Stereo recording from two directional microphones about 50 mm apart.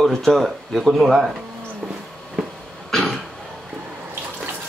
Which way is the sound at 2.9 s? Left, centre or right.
Centre.